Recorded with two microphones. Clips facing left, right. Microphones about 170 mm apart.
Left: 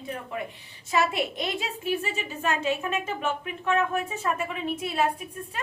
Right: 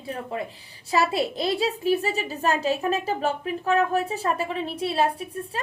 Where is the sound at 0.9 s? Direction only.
30° right (ahead or behind).